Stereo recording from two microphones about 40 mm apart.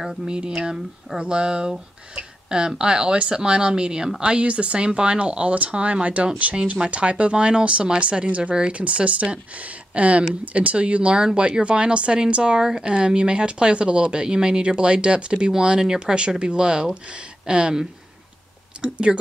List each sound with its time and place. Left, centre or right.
0.0 s speech: centre
0.6 s speech: right